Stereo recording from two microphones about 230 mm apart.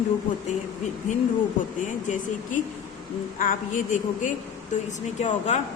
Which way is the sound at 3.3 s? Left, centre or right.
Left.